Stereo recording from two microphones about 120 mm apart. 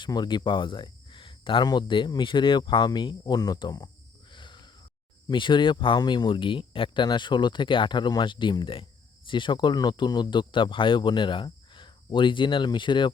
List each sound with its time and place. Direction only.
0.0 s speech: 40° left (ahead or behind)
4.3 s a sound: 40° left (ahead or behind)
5.3 s speech: 40° left (ahead or behind)